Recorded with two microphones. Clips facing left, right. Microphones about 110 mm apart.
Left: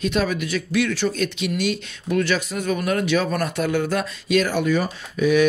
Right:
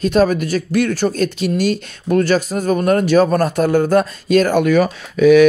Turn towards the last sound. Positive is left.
turn(degrees=-90)